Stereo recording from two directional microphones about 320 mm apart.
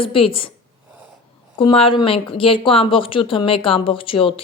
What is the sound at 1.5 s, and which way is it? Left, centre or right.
Speech, centre.